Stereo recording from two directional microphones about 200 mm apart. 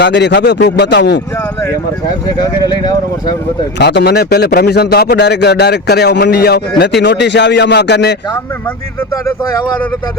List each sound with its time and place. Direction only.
0.0 s a man's voice: 60° left (ahead or behind)
2.4 s speech: 20° left (ahead or behind)
3.8 s a man's voice: 55° left (ahead or behind)